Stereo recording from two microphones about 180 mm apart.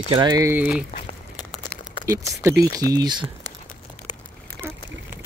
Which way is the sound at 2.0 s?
15° right (ahead or behind).